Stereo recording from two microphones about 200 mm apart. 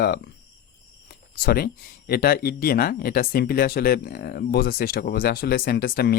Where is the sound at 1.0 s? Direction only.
50° left (ahead or behind).